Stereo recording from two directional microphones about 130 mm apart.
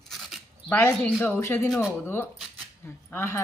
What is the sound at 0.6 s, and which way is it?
Speech, 15° left (ahead or behind).